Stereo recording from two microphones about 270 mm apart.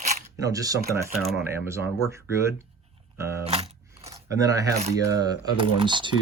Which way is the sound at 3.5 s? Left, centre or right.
Centre.